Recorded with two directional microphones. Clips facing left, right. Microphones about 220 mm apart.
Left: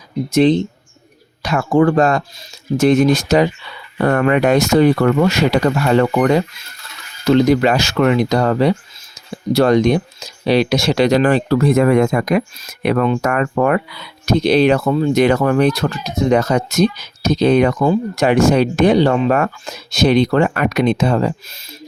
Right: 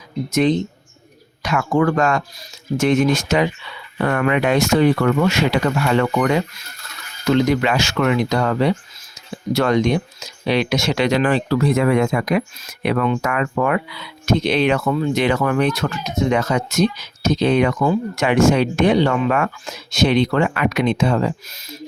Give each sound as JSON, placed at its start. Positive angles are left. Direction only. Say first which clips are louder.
{"t": 0.3, "sound": "speech", "louder": "left 4 dB", "side_deg": 30}